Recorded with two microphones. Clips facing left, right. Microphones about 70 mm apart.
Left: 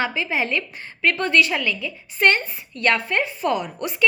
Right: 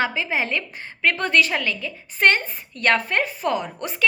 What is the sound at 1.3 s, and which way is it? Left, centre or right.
A woman's voice, right.